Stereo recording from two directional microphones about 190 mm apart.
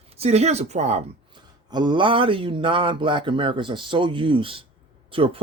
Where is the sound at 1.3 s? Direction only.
20° right (ahead or behind).